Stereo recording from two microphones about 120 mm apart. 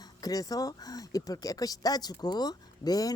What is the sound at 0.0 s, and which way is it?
Speech, 30° left (ahead or behind).